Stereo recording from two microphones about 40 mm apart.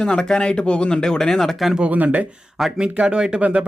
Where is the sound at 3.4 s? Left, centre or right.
Right.